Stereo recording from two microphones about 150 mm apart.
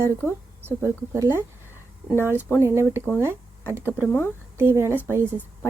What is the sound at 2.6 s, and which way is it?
A woman's voice, 15° right (ahead or behind).